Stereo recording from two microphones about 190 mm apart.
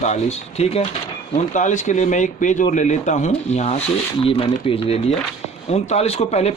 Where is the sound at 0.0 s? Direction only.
35° left (ahead or behind).